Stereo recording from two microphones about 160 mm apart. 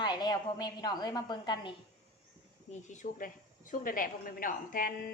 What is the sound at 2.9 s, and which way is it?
A woman's voice, 55° left (ahead or behind).